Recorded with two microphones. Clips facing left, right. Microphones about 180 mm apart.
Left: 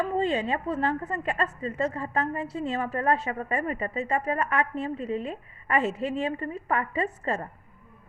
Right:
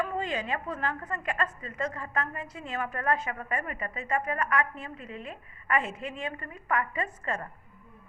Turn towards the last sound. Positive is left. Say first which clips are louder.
# left 5 dB
turn(degrees=35)  # may be behind; listen again after turning